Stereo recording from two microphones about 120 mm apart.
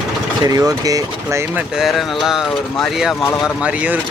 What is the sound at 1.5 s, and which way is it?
Speech, 5° right (ahead or behind).